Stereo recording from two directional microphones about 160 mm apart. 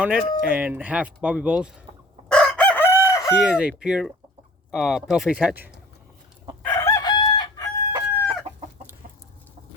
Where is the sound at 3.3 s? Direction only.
5° right (ahead or behind).